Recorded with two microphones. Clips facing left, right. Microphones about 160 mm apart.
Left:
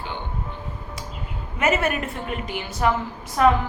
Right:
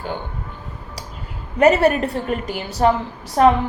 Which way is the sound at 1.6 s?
35° right (ahead or behind).